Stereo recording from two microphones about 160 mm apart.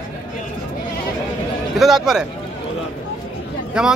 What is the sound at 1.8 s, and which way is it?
Speech, centre (ahead or behind).